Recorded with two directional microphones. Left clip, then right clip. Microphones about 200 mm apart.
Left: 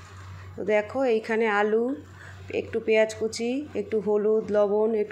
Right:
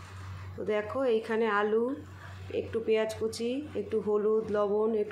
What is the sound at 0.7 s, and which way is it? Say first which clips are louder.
Speech: left 5 dB; 20° left (ahead or behind).